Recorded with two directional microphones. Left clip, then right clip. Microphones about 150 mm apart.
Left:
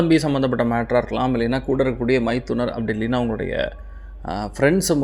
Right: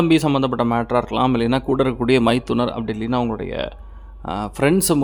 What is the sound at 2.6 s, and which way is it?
Speech, 15° right (ahead or behind).